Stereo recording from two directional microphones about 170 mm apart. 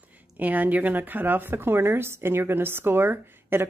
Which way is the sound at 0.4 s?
10° right (ahead or behind).